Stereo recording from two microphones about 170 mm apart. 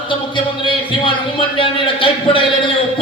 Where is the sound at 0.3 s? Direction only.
30° left (ahead or behind).